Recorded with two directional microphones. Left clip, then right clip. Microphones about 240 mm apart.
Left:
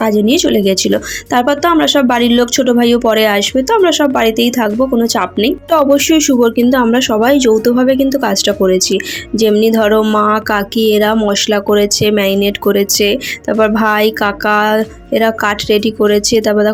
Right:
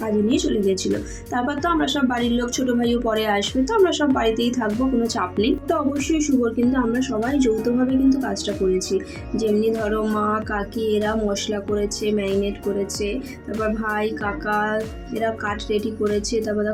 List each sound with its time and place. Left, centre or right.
0.0 s speech: left